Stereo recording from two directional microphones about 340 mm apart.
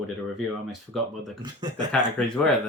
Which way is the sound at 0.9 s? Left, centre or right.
Centre.